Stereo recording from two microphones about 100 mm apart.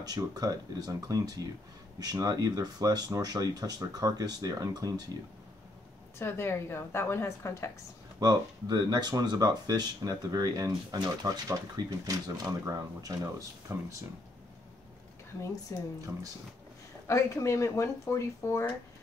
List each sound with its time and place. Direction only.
0.0 s speech: 40° right (ahead or behind)
6.1 s a woman's voice: 25° left (ahead or behind)
8.2 s speech: 40° right (ahead or behind)
15.7 s a woman's voice: 30° left (ahead or behind)
17.1 s a woman's voice: 30° left (ahead or behind)